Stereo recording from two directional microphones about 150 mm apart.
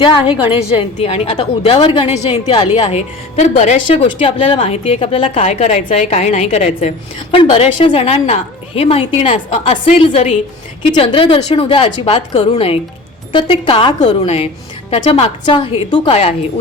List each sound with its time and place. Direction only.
1.0 s a woman's voice: 40° left (ahead or behind)
4.0 s a woman's voice: 35° left (ahead or behind)
4.6 s a woman's voice: 45° left (ahead or behind)
5.4 s a woman's voice: 50° left (ahead or behind)